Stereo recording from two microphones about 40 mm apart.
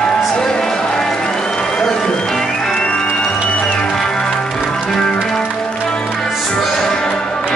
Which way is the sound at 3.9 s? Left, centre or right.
Centre.